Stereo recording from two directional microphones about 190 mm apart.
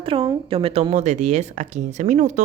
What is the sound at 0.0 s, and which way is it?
A woman's voice, 30° right (ahead or behind).